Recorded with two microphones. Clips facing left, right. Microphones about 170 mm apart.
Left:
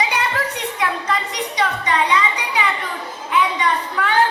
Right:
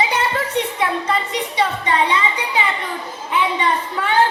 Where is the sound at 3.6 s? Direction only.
25° right (ahead or behind).